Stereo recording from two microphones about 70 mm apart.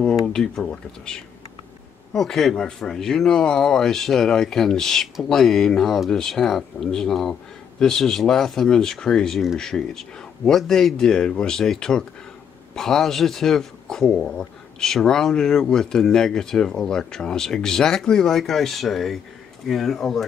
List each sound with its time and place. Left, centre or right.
0.3 s speech: centre